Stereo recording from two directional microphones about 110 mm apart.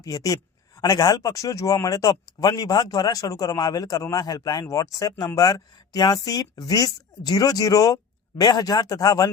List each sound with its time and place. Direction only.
0.0 s speech: 30° left (ahead or behind)